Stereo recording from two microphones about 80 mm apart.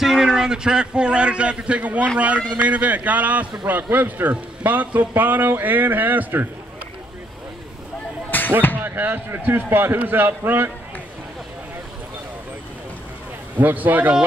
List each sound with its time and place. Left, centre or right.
0.0 s a man's voice: centre; by 6.4 s right
8.3 s music: left
8.8 s a man's voice: right
13.6 s a man's voice: right